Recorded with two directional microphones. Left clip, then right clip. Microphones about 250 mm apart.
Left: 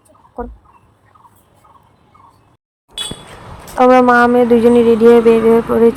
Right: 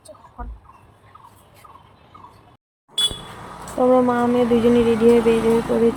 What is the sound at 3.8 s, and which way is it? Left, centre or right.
Speech, left.